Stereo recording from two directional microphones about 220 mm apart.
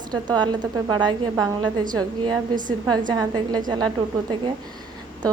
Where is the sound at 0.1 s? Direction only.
20° right (ahead or behind).